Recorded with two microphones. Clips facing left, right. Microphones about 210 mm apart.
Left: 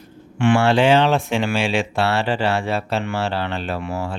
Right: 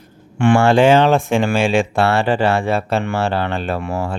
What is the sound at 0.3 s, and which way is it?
Speech, 50° right (ahead or behind).